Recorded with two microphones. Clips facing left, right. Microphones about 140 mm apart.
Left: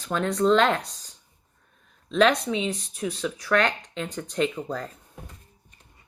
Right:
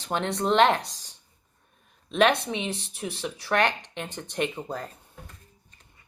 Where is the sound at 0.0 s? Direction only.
30° right (ahead or behind).